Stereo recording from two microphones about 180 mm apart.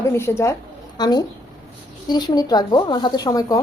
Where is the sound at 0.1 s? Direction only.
15° left (ahead or behind).